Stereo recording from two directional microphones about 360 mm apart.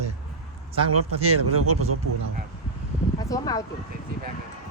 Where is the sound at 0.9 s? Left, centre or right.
Right.